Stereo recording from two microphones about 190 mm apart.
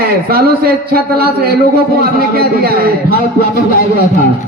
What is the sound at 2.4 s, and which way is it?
Speech, 55° right (ahead or behind).